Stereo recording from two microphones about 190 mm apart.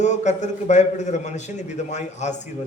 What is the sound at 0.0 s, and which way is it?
A man's voice, 40° left (ahead or behind).